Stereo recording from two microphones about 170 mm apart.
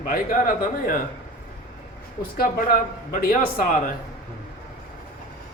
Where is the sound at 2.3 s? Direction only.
55° left (ahead or behind).